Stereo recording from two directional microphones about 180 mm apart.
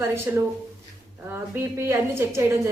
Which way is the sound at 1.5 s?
15° right (ahead or behind).